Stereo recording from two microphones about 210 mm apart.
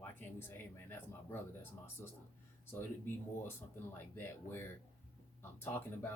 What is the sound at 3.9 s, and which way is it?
Speech, 10° left (ahead or behind).